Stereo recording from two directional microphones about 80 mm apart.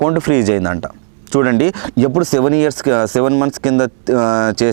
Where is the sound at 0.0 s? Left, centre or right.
Centre.